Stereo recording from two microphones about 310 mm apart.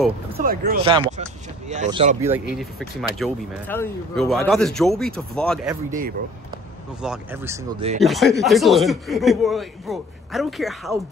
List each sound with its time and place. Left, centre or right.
0.3 s speech: right
2.3 s speech: centre
5.9 s speech: right
7.0 s speech: centre